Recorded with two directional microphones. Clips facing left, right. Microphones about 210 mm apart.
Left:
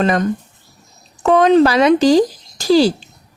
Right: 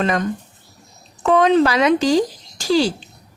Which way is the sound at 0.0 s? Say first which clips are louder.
Left 4 dB; 40° left (ahead or behind).